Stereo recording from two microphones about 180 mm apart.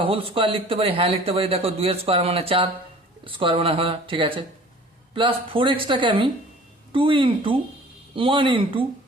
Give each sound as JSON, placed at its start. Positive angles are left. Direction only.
{"t": 0.0, "sound": "speech", "side_deg": -30}